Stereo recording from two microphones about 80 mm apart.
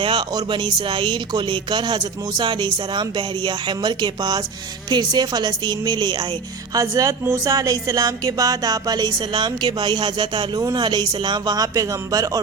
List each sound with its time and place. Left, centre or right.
0.0 s speech: right
2.4 s a woman's voice: right
6.7 s a woman's voice: right
11.5 s speech: right